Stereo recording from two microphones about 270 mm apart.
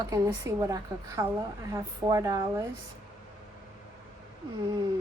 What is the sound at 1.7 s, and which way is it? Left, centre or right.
Speech, centre.